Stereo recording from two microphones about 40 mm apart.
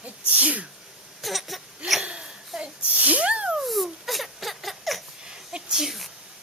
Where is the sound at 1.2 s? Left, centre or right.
Centre.